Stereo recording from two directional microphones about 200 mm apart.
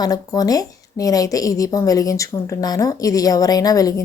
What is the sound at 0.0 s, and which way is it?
A woman's voice, 20° left (ahead or behind).